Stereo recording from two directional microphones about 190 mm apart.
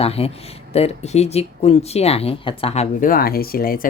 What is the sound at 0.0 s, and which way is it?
Speech, 30° left (ahead or behind).